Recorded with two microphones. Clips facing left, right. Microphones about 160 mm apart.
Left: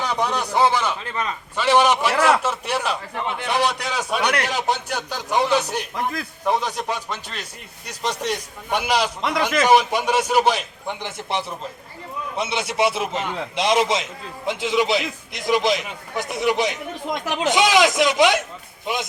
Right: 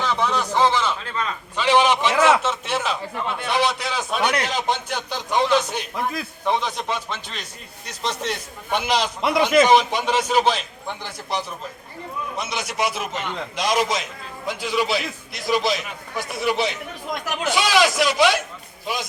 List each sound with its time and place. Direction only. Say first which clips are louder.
0.0 s a man's voice: right 1 dB; 15° left (ahead or behind)
2.1 s a man's voice: right 3 dB; 5° right (ahead or behind)
2.4 s a man's voice: even; 10° left (ahead or behind)
9.2 s a man's voice: right 4 dB; 10° right (ahead or behind)
9.6 s a man's voice: even; 10° left (ahead or behind)
11.3 s a man's voice: even; 25° left (ahead or behind)